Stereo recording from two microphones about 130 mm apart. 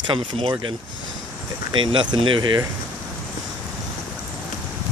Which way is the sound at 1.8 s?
40° right (ahead or behind).